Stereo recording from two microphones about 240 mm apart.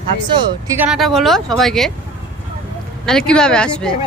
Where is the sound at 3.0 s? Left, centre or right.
Centre.